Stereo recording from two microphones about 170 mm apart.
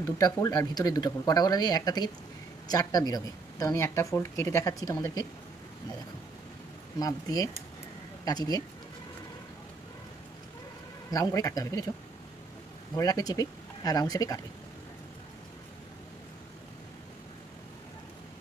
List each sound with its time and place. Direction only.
0.0 s speech: 20° left (ahead or behind)
7.0 s speech: 20° left (ahead or behind)
11.1 s speech: 20° left (ahead or behind)
12.9 s speech: 20° left (ahead or behind)